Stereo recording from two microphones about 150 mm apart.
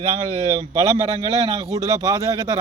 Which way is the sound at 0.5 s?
25° right (ahead or behind).